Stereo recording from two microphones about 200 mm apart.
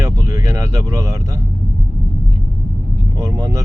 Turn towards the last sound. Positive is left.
turn(degrees=-15)  # may be behind; listen again after turning